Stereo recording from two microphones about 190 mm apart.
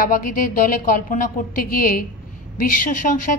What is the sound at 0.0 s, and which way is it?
A woman's voice, 45° left (ahead or behind).